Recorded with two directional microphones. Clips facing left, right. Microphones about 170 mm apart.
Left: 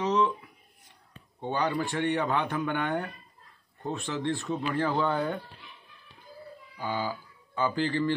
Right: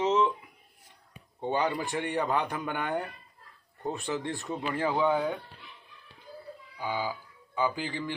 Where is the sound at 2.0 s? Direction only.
Centre (ahead or behind).